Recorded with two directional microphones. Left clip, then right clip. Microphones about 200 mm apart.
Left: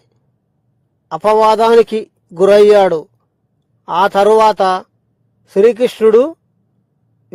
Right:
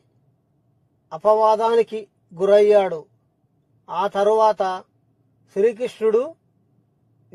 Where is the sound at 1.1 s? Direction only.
40° left (ahead or behind).